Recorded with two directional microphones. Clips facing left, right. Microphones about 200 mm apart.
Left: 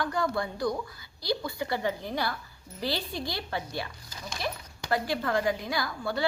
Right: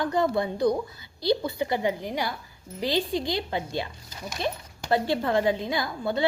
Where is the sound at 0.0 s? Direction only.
20° right (ahead or behind).